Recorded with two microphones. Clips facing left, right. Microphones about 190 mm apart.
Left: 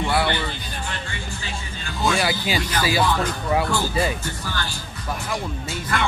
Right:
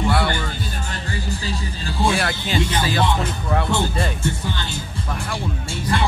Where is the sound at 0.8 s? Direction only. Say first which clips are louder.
Right 4 dB; 35° right (ahead or behind).